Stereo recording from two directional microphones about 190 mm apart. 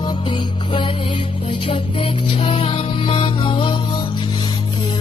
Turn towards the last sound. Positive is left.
turn(degrees=25)  # may be behind; listen again after turning